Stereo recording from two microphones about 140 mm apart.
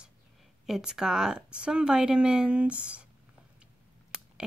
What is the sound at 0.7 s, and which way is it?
Speech, 5° right (ahead or behind).